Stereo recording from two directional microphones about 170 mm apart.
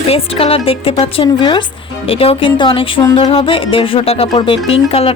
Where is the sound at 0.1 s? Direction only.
35° left (ahead or behind).